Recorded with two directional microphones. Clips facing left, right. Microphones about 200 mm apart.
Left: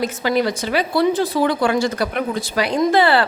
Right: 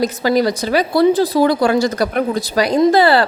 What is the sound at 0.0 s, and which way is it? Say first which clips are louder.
A woman's voice: right 4 dB; 40° right (ahead or behind).